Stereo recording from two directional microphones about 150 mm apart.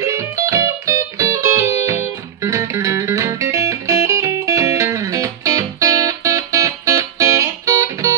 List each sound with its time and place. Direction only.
0.0 s music: 20° right (ahead or behind)